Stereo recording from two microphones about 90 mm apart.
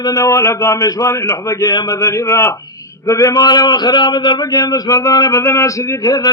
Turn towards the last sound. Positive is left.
turn(degrees=45)  # may be behind; listen again after turning